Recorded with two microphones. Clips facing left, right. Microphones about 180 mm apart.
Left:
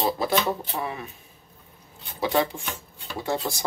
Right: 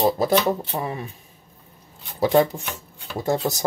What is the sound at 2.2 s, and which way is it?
Speech, 45° right (ahead or behind).